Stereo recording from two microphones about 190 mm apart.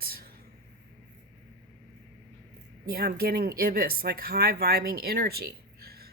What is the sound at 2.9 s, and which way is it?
A woman's voice, 55° right (ahead or behind).